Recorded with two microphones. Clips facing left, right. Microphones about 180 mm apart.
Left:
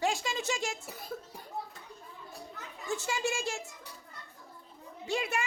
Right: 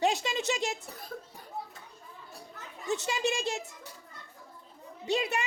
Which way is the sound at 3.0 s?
20° right (ahead or behind).